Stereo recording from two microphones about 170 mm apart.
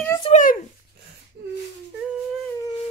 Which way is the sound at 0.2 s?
45° left (ahead or behind).